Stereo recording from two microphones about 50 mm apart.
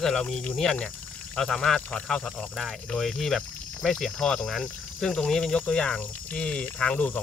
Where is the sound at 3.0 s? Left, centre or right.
Centre; by 7.0 s left.